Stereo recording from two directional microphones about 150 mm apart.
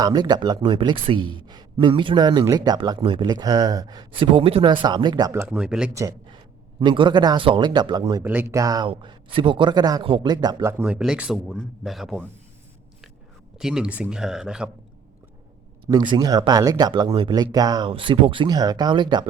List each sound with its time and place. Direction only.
0.0 s a man's voice: 25° right (ahead or behind)
5.5 s speech: 5° right (ahead or behind)
5.9 s a man's voice: 20° right (ahead or behind)
6.7 s a man's voice: 35° right (ahead or behind)
8.2 s speech: 15° right (ahead or behind)
8.5 s a man's voice: 25° right (ahead or behind)
8.9 s a man's voice: 35° right (ahead or behind); by 12.2 s centre (ahead or behind)
13.6 s speech: 5° right (ahead or behind)
15.9 s a man's voice: 30° right (ahead or behind)